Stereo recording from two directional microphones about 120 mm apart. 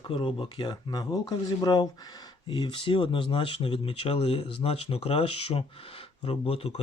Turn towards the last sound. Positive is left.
turn(degrees=55)  # may be behind; listen again after turning